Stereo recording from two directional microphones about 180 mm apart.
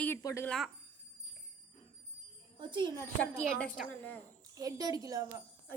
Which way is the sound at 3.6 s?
10° left (ahead or behind).